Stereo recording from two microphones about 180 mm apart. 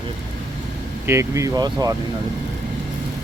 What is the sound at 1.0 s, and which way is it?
Speech, 15° right (ahead or behind).